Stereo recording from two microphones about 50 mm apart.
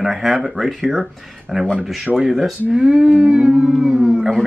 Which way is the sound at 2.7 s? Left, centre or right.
Centre.